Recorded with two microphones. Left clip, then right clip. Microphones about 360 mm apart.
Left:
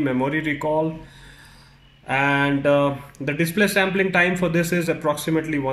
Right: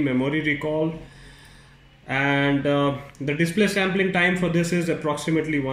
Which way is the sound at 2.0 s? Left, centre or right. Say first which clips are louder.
Left 2 dB; left.